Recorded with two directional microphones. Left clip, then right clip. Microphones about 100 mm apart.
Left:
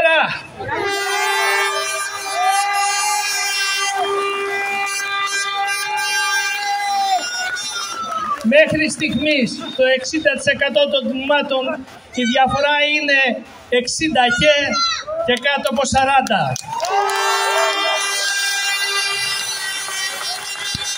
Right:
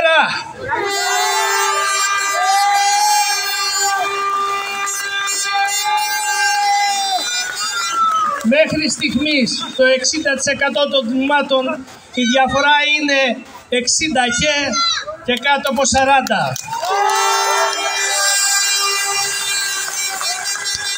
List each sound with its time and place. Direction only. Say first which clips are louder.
0.0 s a sound: right 2 dB; 40° left (ahead or behind)
1.0 s vehicle: right 1 dB; 5° right (ahead or behind)
2.3 s emergency vehicle: left 1 dB; 10° right (ahead or behind)
8.5 s a man's voice: left 4 dB; 40° left (ahead or behind)
12.6 s a man's voice: right 2 dB; 40° left (ahead or behind)
17.0 s crowd: right 4 dB; 5° left (ahead or behind)